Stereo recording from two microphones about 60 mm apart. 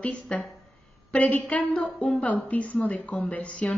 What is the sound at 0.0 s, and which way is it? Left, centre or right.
A woman's voice, centre.